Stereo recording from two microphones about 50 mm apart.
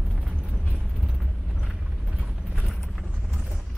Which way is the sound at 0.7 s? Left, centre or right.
Centre.